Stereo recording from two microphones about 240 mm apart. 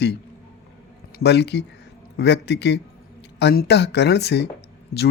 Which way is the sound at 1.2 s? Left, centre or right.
Left.